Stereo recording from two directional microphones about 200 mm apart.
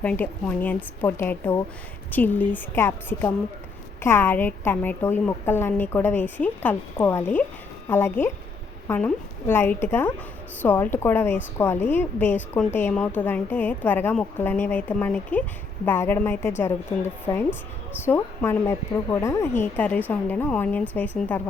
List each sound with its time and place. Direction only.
0.0 s a woman's voice: 5° left (ahead or behind)